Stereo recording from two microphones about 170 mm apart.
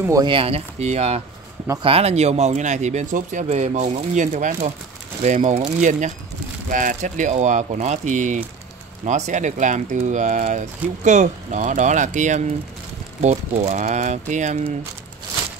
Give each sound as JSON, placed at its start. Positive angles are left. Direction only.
{"t": 0.0, "sound": "speech", "side_deg": -20}
{"t": 0.3, "sound": "speech", "side_deg": -35}